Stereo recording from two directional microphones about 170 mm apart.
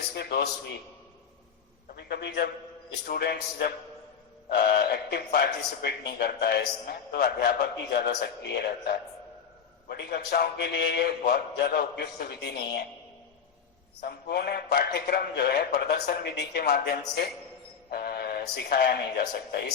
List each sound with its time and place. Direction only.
0.1 s a man's voice: 70° left (ahead or behind)
2.0 s a man's voice: 75° left (ahead or behind)
14.0 s a man's voice: 70° left (ahead or behind)